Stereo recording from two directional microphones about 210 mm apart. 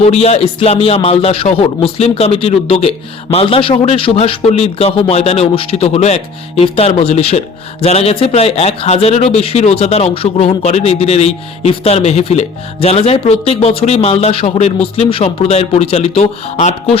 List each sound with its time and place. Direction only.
0.0 s speech: 30° left (ahead or behind)